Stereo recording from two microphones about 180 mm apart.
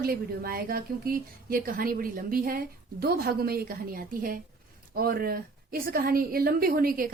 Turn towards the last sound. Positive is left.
turn(degrees=-55)  # may be behind; listen again after turning